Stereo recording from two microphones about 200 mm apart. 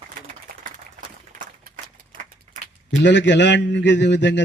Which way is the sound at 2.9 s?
60° left (ahead or behind).